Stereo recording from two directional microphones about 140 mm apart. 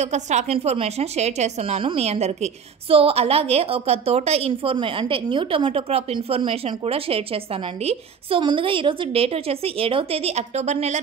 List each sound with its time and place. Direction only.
0.0 s a woman's voice: 55° right (ahead or behind)